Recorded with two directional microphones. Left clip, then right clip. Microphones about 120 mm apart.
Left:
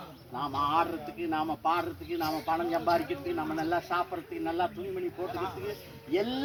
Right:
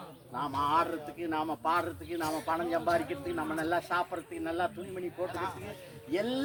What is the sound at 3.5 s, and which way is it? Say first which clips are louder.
Speech: even; 30° right (ahead or behind).